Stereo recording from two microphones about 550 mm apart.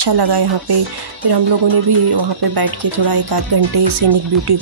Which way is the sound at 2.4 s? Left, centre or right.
Right.